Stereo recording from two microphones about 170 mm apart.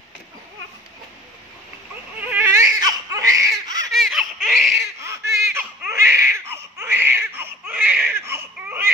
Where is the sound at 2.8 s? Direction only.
20° right (ahead or behind).